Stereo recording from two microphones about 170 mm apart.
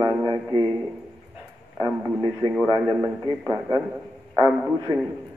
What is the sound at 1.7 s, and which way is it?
Speech, 20° right (ahead or behind).